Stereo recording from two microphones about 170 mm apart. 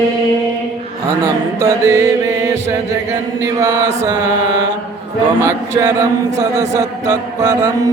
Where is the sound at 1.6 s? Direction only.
15° right (ahead or behind).